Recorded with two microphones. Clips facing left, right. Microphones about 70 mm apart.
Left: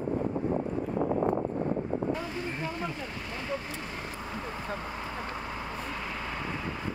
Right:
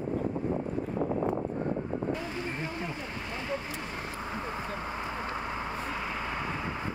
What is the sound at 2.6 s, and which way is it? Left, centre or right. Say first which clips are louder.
Boat: left 1 dB; right.